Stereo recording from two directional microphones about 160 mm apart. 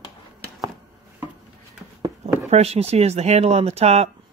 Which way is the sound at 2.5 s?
40° right (ahead or behind).